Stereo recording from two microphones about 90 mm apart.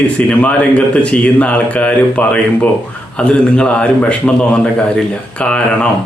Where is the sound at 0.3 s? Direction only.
15° left (ahead or behind).